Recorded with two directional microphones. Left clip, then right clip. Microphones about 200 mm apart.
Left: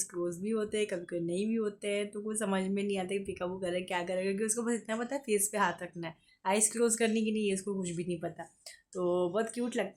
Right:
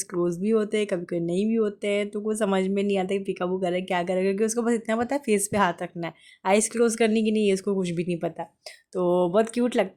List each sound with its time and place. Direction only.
0.1 s speech: 35° right (ahead or behind)